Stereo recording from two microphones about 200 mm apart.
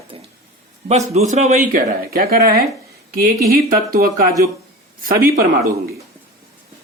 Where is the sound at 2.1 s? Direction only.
50° right (ahead or behind).